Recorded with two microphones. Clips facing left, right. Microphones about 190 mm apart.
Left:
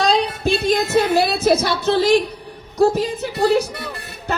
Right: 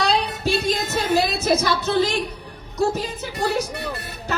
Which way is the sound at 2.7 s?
55° left (ahead or behind).